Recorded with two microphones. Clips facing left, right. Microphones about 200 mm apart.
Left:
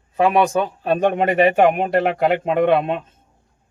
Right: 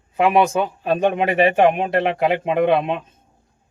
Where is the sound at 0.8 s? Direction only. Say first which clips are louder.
Left 1 dB; centre (ahead or behind).